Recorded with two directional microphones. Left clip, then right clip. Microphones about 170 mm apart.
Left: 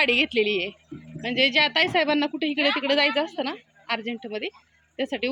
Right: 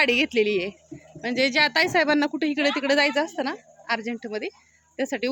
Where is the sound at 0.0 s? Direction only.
20° right (ahead or behind).